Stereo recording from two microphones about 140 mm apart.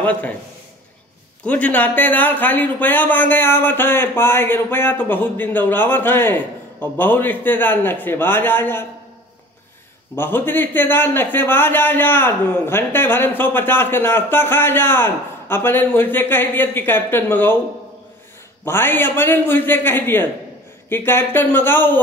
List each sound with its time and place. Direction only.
0.0 s a man's voice: 10° left (ahead or behind)
1.4 s a man's voice: 10° left (ahead or behind)
10.1 s a man's voice: 15° left (ahead or behind)
18.7 s a man's voice: 15° left (ahead or behind)